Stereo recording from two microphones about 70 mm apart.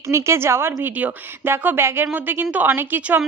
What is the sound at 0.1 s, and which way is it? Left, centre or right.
A woman's voice, right.